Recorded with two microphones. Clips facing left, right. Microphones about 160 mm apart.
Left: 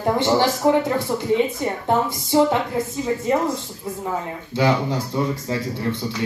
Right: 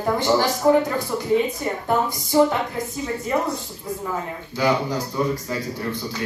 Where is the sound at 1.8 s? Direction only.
25° left (ahead or behind).